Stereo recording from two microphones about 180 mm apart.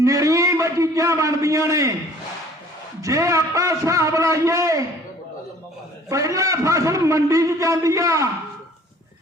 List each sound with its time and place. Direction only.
0.0 s a sound: 20° right (ahead or behind)
3.0 s a man's voice: 20° right (ahead or behind)
6.1 s a man's voice: 20° right (ahead or behind)